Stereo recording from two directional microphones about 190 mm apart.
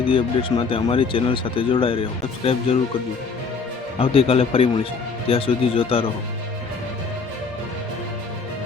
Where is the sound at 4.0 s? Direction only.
30° left (ahead or behind).